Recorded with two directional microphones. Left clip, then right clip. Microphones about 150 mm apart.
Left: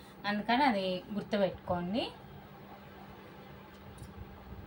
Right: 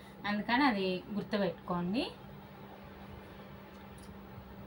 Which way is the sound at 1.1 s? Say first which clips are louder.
Left 6 dB; 35° left (ahead or behind).